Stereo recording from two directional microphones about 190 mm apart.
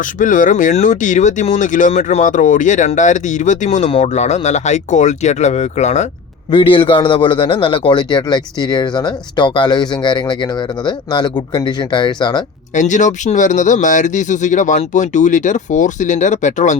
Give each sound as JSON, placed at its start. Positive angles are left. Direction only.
{"t": 0.0, "sound": "speech", "side_deg": 45}
{"t": 6.5, "sound": "speech", "side_deg": 25}
{"t": 12.7, "sound": "speech", "side_deg": 40}